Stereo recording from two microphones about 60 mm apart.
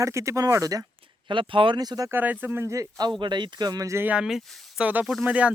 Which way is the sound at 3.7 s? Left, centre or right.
Right.